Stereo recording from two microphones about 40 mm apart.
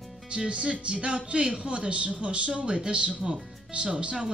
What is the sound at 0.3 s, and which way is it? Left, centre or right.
Speech, right.